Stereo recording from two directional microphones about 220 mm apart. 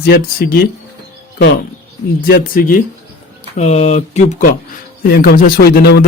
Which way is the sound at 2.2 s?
40° left (ahead or behind).